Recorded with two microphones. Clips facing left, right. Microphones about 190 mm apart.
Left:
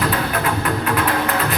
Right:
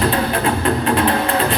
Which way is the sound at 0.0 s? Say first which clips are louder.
Right 3 dB; 30° right (ahead or behind).